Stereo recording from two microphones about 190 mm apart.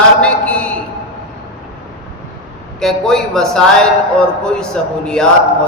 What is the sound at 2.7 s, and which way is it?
Speech, 5° left (ahead or behind).